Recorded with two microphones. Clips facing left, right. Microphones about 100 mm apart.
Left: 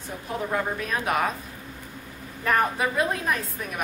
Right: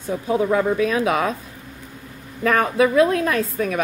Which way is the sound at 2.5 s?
90° right.